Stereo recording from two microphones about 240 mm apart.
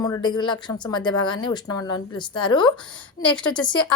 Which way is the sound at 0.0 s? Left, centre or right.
Centre.